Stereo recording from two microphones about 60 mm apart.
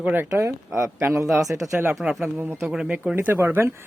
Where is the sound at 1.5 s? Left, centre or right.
Right.